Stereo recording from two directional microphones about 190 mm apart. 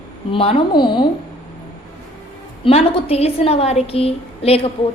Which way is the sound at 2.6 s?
30° left (ahead or behind).